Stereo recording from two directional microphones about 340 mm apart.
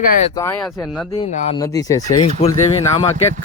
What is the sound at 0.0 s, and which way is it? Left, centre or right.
Speech, centre.